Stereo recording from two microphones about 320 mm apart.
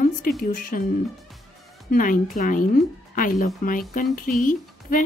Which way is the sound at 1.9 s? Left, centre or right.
Left.